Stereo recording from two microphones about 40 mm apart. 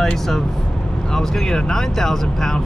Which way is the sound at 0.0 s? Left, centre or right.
Centre.